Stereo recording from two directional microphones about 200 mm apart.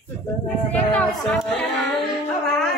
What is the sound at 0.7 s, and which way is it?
Speech, 5° left (ahead or behind).